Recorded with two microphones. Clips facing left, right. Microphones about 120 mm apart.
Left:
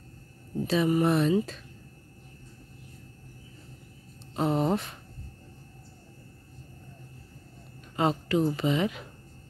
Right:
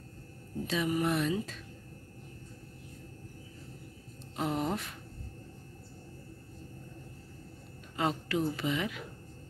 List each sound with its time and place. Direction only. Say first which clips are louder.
0.7 s speech: left 6 dB; 30° left (ahead or behind)
4.4 s speech: left 6 dB; 30° left (ahead or behind)
7.9 s a woman's voice: left 6 dB; 25° left (ahead or behind)